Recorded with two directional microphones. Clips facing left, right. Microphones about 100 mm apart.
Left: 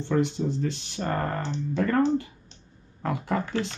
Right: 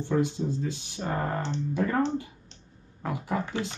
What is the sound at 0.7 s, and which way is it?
Speech, 75° left (ahead or behind).